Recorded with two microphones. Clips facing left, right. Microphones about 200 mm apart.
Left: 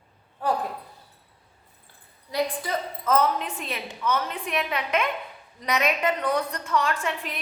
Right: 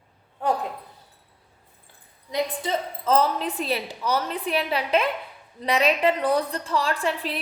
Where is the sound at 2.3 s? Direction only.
25° right (ahead or behind).